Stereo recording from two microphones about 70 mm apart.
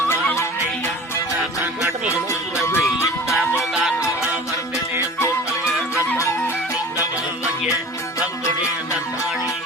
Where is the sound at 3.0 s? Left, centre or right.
Left.